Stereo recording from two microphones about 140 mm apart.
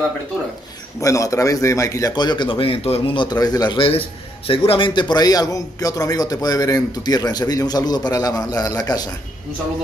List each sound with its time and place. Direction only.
1.0 s a man's voice: 25° left (ahead or behind)